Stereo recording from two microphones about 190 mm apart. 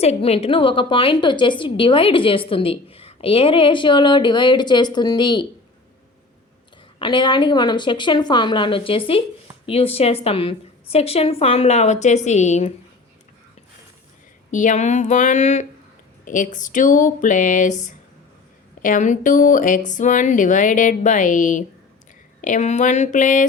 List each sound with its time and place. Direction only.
0.0 s a woman's voice: 35° left (ahead or behind)
7.0 s a woman's voice: 25° left (ahead or behind)
14.5 s a woman's voice: 40° left (ahead or behind)